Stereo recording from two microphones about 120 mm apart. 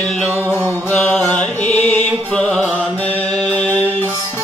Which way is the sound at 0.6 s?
15° left (ahead or behind).